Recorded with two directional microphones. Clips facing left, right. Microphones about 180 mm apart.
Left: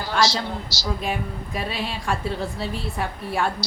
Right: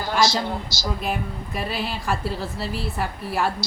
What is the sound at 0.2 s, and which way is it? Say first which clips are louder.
Speech: right 1 dB; 50° right (ahead or behind).